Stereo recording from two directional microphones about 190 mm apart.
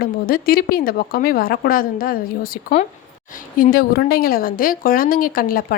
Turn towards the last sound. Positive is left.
turn(degrees=50)  # may be behind; listen again after turning